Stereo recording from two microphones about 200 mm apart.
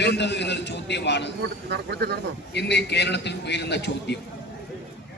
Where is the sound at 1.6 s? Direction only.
55° right (ahead or behind).